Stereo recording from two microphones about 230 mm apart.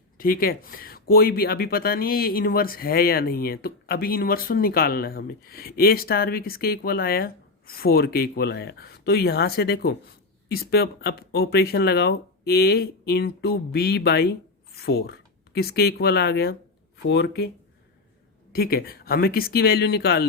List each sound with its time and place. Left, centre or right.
0.2 s speech: left
18.5 s speech: left